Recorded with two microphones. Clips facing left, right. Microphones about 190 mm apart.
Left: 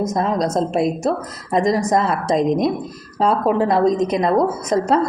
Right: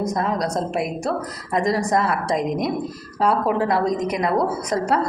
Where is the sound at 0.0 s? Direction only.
20° left (ahead or behind).